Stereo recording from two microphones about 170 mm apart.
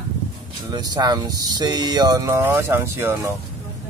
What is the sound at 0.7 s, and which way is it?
Speech, 25° right (ahead or behind).